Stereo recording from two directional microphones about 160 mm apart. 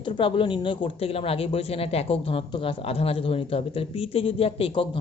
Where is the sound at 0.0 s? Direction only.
30° left (ahead or behind).